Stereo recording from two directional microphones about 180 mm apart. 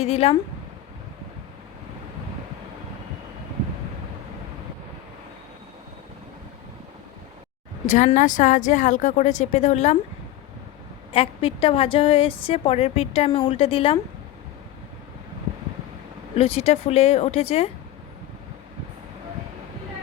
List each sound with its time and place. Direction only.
0.0 s a woman's voice: 35° left (ahead or behind)
7.9 s a woman's voice: 45° left (ahead or behind)
11.1 s a woman's voice: 30° left (ahead or behind)
16.3 s a woman's voice: 35° left (ahead or behind)